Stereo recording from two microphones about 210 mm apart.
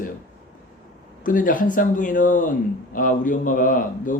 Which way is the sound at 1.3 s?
40° left (ahead or behind).